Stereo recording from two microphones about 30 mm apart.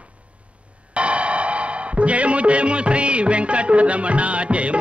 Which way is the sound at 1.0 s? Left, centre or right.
Right.